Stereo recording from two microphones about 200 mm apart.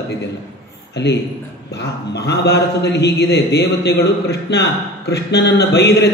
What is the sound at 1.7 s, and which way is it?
A man's voice, 55° left (ahead or behind).